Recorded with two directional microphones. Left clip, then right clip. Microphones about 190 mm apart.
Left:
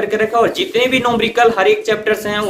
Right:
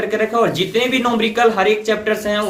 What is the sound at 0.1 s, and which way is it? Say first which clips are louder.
Speech: left 2 dB; 30° left (ahead or behind).